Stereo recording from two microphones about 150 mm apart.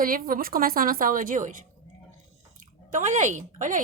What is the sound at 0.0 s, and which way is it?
A woman's voice, 70° right (ahead or behind).